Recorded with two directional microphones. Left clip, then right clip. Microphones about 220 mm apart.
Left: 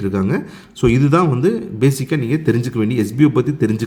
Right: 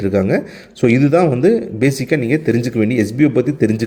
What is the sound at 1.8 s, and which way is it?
Speech, 50° left (ahead or behind).